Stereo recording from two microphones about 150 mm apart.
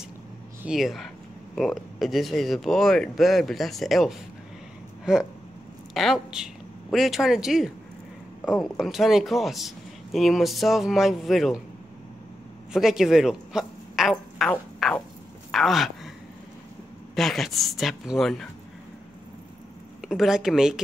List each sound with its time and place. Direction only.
0.6 s speech: 5° right (ahead or behind)
12.7 s speech: 5° right (ahead or behind)
14.5 s a sound: 5° left (ahead or behind)
17.1 s speech: centre (ahead or behind)
20.0 s speech: centre (ahead or behind)